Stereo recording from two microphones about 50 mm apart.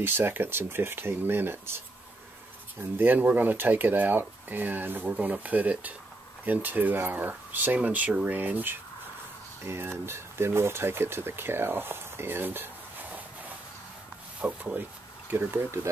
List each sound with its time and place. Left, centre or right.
0.0 s speech: right
2.8 s speech: right
5.1 s speech: right
9.7 s speech: right
14.4 s speech: right